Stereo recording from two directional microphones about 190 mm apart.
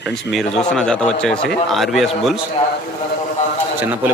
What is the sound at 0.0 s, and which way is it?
A man's voice, centre (ahead or behind).